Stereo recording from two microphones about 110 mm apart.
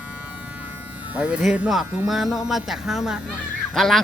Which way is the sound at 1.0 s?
10° right (ahead or behind).